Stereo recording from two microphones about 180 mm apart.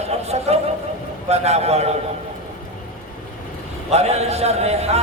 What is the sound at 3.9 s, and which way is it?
A man's voice, 35° right (ahead or behind).